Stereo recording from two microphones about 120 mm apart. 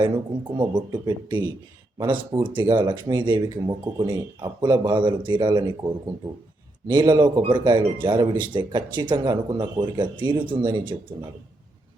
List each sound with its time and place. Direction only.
0.0 s speech: 40° right (ahead or behind)